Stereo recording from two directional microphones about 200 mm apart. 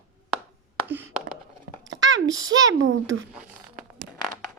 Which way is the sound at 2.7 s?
80° right.